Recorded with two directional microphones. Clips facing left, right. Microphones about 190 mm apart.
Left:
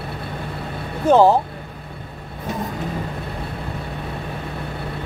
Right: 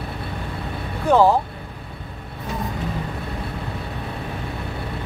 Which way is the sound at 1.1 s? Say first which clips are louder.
Left 2 dB; 20° left (ahead or behind).